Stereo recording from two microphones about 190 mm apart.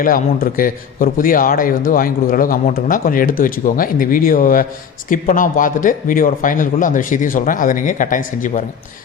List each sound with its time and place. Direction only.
0.0 s a man's voice: 50° left (ahead or behind)